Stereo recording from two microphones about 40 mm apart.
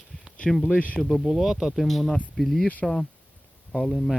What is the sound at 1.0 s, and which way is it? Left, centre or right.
Speech, centre.